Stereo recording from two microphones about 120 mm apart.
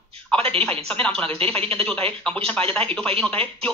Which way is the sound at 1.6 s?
50° right (ahead or behind).